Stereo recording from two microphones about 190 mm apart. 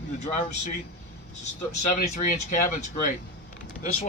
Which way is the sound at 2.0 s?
45° left (ahead or behind).